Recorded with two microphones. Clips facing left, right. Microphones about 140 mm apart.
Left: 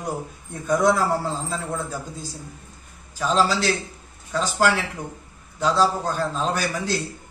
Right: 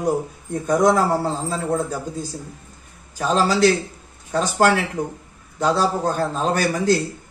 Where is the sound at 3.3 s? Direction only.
50° right (ahead or behind).